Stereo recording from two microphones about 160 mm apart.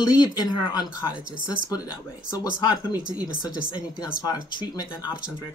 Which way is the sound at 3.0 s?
5° right (ahead or behind).